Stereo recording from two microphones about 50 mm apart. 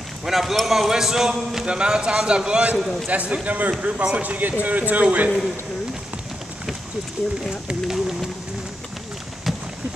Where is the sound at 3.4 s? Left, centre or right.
Right.